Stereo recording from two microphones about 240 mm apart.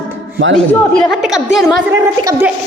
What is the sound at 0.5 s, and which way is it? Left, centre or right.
A woman's voice, centre.